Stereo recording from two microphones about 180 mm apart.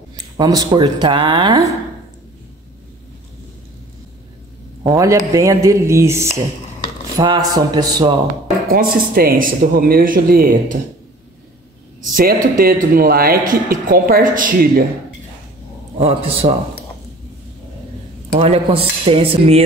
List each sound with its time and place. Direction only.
0.1 s speech: 20° right (ahead or behind)
4.8 s speech: 15° right (ahead or behind)
8.3 s speech: 55° right (ahead or behind)
12.0 s speech: 50° right (ahead or behind)
16.0 s speech: 35° right (ahead or behind)
18.8 s speech: 35° right (ahead or behind)